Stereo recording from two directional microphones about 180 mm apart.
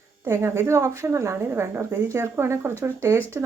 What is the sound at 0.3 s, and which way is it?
A woman's voice, 15° right (ahead or behind).